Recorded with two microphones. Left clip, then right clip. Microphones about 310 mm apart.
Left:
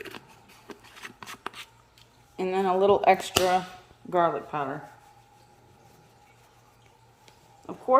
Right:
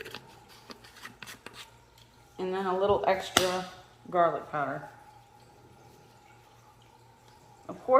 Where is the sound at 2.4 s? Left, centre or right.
Left.